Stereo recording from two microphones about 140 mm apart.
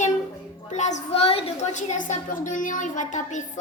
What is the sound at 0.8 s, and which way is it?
Child singing, 55° left (ahead or behind).